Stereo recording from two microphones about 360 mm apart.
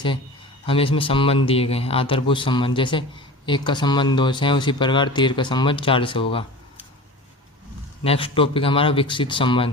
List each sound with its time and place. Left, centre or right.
0.6 s speech: centre
8.0 s speech: centre